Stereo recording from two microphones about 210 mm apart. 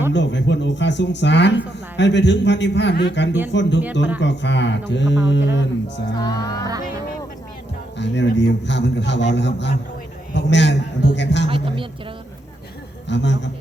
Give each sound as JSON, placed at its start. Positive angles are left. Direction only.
{"t": 0.1, "sound": "a man's voice", "side_deg": 60}
{"t": 6.1, "sound": "speech", "side_deg": 20}
{"t": 7.9, "sound": "a man's voice", "side_deg": 55}
{"t": 11.4, "sound": "speech", "side_deg": -25}
{"t": 13.1, "sound": "a man's voice", "side_deg": 55}